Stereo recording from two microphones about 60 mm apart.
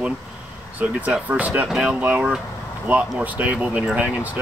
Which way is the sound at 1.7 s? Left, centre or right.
Centre.